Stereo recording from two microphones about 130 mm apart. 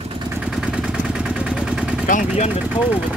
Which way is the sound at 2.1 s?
80° left.